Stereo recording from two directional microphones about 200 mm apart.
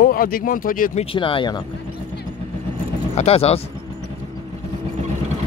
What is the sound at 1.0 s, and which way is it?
Speech, 25° left (ahead or behind).